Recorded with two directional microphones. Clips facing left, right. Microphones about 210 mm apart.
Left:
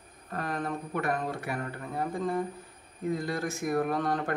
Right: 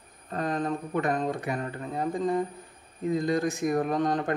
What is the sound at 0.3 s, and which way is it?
Speech, 20° right (ahead or behind).